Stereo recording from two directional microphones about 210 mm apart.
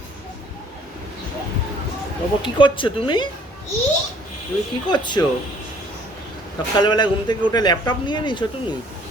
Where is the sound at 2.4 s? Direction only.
25° left (ahead or behind).